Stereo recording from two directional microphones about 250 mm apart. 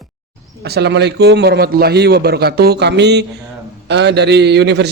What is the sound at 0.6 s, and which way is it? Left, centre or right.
A man's voice, right.